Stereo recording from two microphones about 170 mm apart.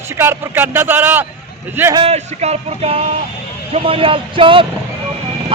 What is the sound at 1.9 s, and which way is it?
A man's voice, 35° right (ahead or behind).